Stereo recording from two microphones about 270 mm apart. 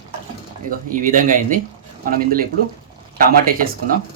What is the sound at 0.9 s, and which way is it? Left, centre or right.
Speech, right.